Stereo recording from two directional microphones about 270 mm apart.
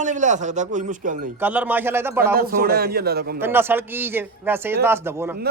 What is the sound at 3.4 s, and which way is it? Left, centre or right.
Speech, centre.